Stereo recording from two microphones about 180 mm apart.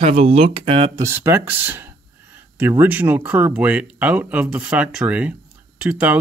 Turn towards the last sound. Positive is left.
turn(degrees=-5)  # may be behind; listen again after turning